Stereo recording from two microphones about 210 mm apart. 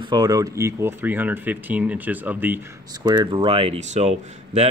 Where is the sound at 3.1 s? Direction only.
20° right (ahead or behind).